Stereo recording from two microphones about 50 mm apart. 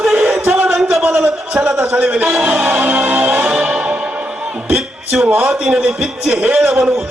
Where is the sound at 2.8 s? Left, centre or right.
Right.